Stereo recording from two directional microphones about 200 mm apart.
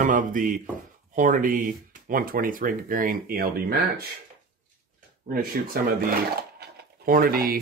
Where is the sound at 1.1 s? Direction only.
40° right (ahead or behind).